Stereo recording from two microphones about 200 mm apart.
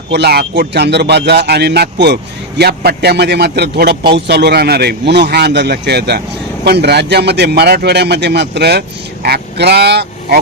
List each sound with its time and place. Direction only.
0.1 s a man's voice: 55° right (ahead or behind)